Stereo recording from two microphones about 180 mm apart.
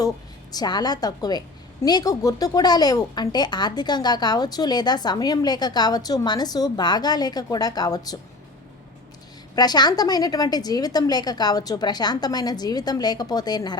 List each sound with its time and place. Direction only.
0.5 s a woman's voice: 20° left (ahead or behind)
9.6 s a woman's voice: 20° left (ahead or behind)